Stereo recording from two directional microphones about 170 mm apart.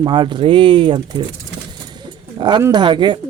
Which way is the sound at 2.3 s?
25° right (ahead or behind).